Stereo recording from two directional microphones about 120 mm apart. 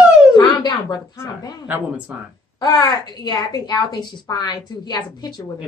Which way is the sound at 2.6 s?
40° left (ahead or behind).